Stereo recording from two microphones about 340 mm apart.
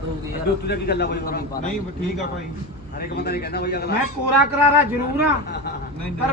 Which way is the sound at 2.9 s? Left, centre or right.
Left.